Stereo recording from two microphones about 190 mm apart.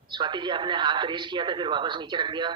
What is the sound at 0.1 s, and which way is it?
A woman's voice, 25° right (ahead or behind).